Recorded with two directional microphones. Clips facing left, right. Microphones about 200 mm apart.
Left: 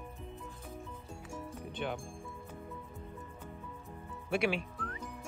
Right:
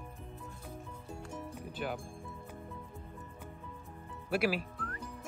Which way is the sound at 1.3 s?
5° right (ahead or behind).